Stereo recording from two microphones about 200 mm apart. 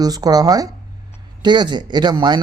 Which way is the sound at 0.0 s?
20° right (ahead or behind).